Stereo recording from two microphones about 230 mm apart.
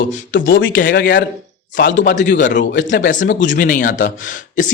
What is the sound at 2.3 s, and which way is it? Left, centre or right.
Speech, left.